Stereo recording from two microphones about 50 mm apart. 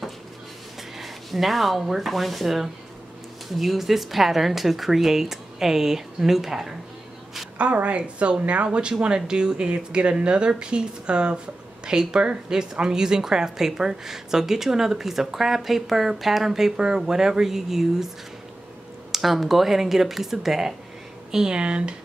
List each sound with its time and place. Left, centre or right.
0.9 s a woman's voice: centre
7.5 s a woman's voice: right; by 18.1 s centre
19.1 s a woman's voice: centre; by 21.9 s right